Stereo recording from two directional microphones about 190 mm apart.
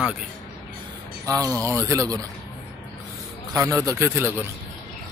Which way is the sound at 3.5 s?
15° right (ahead or behind).